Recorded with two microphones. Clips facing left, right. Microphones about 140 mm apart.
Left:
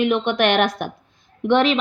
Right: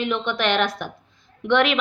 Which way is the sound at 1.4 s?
35° left (ahead or behind).